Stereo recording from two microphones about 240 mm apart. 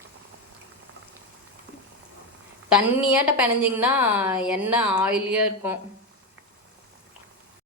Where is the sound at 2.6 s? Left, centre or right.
Centre.